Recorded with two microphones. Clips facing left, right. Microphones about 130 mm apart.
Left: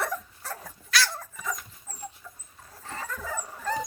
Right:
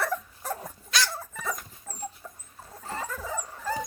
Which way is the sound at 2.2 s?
45° right (ahead or behind).